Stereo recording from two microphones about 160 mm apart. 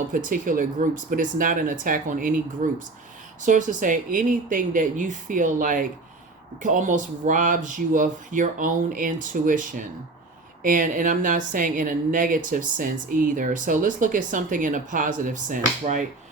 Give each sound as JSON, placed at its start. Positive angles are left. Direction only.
{"t": 0.1, "sound": "a woman's voice", "side_deg": -55}